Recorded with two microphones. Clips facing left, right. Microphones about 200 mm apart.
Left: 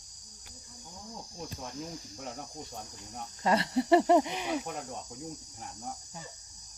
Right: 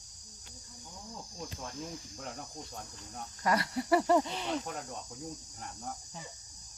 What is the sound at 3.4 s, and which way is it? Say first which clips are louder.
Speech: left 4 dB; 25° left (ahead or behind).